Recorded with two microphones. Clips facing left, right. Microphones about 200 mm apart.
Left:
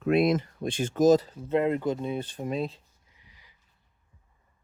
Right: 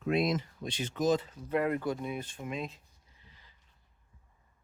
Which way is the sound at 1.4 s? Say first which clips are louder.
Left 5 dB; 25° left (ahead or behind).